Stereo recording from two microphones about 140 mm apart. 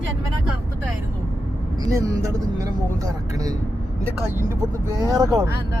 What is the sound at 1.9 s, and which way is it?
Speech, 25° right (ahead or behind).